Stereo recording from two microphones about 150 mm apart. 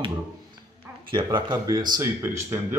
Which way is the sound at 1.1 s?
30° right (ahead or behind).